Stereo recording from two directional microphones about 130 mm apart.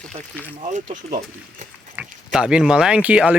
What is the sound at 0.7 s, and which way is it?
Speech, 75° right (ahead or behind).